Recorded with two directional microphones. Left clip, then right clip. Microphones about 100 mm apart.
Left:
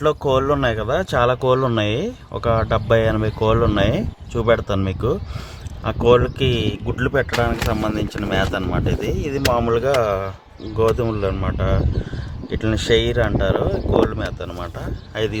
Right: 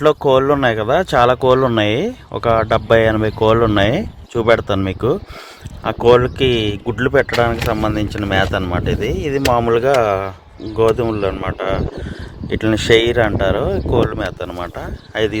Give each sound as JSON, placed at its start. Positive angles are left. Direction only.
{"t": 0.0, "sound": "speech", "side_deg": -45}
{"t": 10.8, "sound": "speech", "side_deg": -35}
{"t": 12.5, "sound": "speech", "side_deg": -60}